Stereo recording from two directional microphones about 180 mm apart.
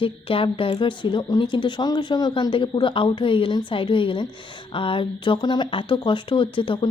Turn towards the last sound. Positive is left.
turn(degrees=25)  # may be behind; listen again after turning